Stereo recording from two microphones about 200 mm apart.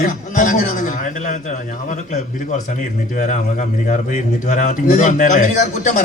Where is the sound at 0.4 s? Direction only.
40° left (ahead or behind).